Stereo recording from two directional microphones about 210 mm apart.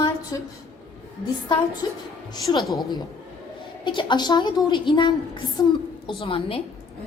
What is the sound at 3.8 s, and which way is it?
A woman's voice, 20° left (ahead or behind).